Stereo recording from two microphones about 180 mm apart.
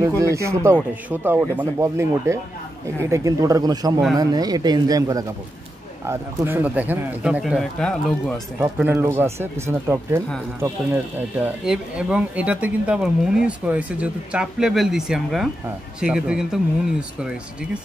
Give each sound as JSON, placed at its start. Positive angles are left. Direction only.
{"t": 0.2, "sound": "speech", "side_deg": -15}
{"t": 8.5, "sound": "speech", "side_deg": -10}